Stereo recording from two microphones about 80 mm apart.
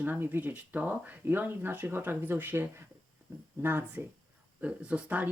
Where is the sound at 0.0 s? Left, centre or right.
Right.